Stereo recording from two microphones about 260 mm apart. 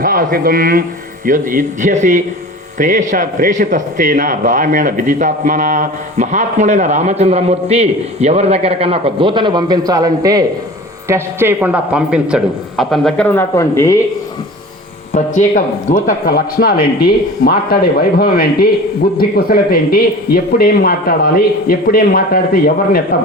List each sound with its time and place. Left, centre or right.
0.0 s a man's voice: right; by 14.0 s centre
15.1 s speech: left